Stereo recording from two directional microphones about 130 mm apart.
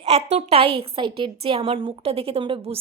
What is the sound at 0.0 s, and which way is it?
A woman's voice, 60° right (ahead or behind).